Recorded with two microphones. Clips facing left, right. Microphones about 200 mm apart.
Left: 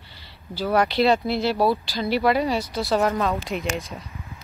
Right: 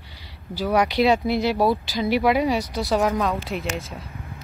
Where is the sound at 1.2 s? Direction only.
15° right (ahead or behind).